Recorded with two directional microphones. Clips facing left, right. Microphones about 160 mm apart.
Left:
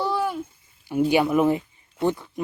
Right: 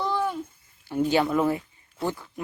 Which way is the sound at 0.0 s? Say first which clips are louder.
Left 2 dB; 10° left (ahead or behind).